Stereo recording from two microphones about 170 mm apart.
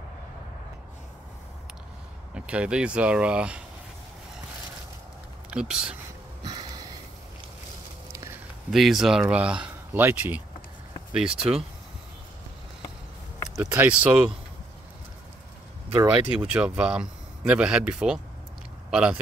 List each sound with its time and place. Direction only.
2.3 s speech: 5° right (ahead or behind)
5.5 s a man's voice: 5° right (ahead or behind)
6.4 s sniff: 25° right (ahead or behind)
8.1 s a sound: 20° right (ahead or behind)
8.6 s a man's voice: centre (ahead or behind)
13.6 s speech: 10° right (ahead or behind)
15.9 s a man's voice: 10° right (ahead or behind)